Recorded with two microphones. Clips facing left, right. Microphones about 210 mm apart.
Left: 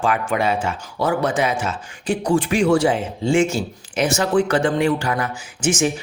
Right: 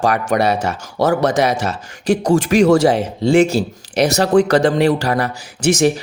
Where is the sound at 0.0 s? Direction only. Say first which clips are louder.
Right 4 dB; 40° right (ahead or behind).